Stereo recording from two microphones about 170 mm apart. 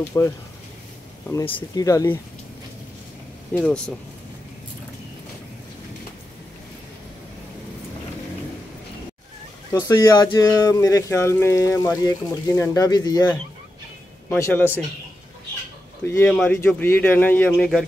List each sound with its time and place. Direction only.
0.2 s speech: 15° left (ahead or behind)
1.4 s speech: 30° left (ahead or behind)
1.9 s speech: 20° left (ahead or behind)
3.5 s speech: 5° left (ahead or behind)
9.7 s speech: 20° left (ahead or behind)
14.3 s speech: 10° left (ahead or behind)
16.1 s speech: 5° left (ahead or behind)